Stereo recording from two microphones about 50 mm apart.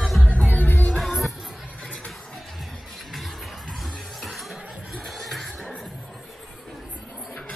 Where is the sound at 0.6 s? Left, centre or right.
Left.